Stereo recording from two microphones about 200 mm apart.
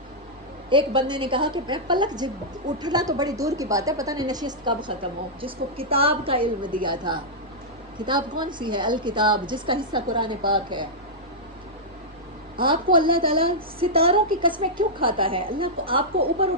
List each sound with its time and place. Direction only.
0.7 s a woman's voice: 25° right (ahead or behind)
12.9 s a woman's voice: 25° right (ahead or behind)